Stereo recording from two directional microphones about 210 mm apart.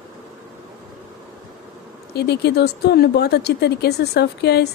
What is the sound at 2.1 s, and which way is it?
Speech, 50° left (ahead or behind).